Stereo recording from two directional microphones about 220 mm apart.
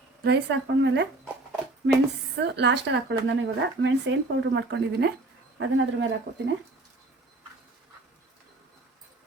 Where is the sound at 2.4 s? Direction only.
50° right (ahead or behind).